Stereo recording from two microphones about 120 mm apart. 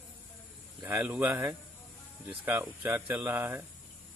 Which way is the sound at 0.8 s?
15° right (ahead or behind).